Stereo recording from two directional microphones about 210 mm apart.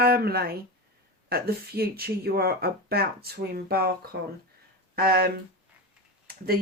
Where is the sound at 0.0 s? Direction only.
45° right (ahead or behind).